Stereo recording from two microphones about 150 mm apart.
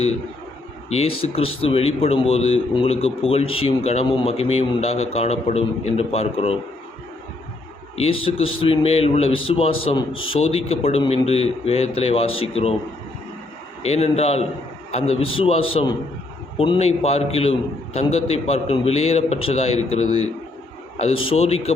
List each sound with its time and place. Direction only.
0.9 s a man's voice: 40° left (ahead or behind)
7.9 s a man's voice: 40° left (ahead or behind)
13.8 s a man's voice: 45° left (ahead or behind)